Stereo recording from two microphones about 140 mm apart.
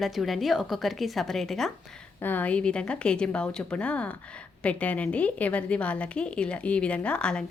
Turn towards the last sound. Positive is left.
turn(degrees=5)  # may be behind; listen again after turning